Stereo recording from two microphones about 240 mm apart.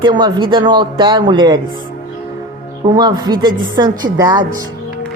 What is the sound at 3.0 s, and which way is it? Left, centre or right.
Speech, centre.